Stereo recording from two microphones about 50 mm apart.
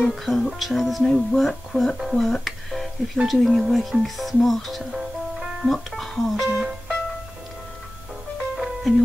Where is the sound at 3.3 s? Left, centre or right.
Centre.